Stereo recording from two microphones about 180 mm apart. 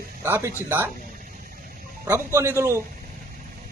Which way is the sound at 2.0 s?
15° right (ahead or behind).